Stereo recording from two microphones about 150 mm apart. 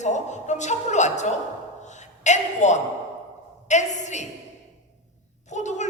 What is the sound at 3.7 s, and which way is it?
Speech, 50° left (ahead or behind).